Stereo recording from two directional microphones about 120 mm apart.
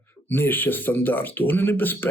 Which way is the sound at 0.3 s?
15° left (ahead or behind).